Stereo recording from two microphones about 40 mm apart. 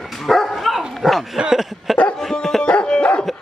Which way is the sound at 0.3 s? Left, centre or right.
Centre.